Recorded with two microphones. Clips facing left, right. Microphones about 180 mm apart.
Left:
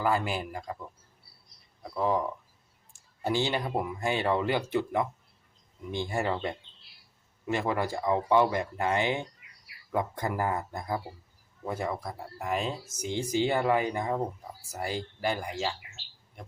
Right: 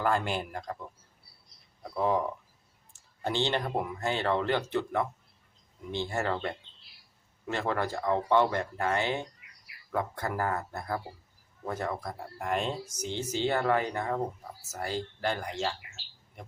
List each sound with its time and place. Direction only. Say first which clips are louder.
0.0 s speech: left 1 dB; 5° left (ahead or behind)
1.8 s speech: even; centre (ahead or behind)